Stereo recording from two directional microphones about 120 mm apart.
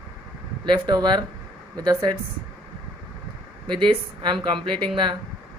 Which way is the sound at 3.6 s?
40° right (ahead or behind).